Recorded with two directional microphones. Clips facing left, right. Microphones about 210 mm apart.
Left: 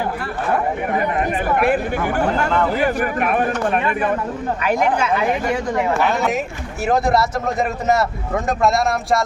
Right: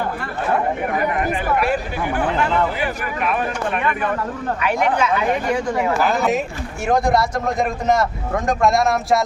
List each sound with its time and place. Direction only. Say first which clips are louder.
1.5 s speech: left 3 dB; 55° left (ahead or behind)
4.6 s speech: even; 40° left (ahead or behind)
6.0 s speech: right 1 dB; centre (ahead or behind)